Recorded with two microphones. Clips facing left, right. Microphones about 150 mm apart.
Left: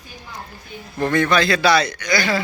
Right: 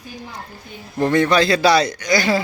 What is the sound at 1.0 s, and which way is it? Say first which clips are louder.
A man's voice: right 2 dB; 30° right (ahead or behind).